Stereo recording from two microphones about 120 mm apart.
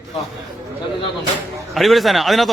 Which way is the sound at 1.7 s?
Centre (ahead or behind).